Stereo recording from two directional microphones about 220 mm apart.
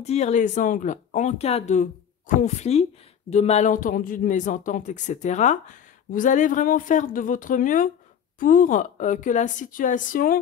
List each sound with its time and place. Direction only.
0.0 s speech: 30° left (ahead or behind)